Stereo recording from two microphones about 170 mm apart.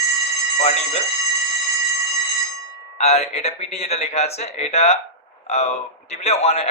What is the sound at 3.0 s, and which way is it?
A man's voice, 40° left (ahead or behind).